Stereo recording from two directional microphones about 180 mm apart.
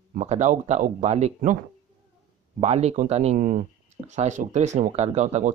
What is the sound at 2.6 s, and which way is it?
Speech, 35° right (ahead or behind).